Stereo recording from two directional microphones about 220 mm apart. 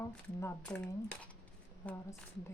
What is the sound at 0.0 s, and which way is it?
Speech, 10° left (ahead or behind).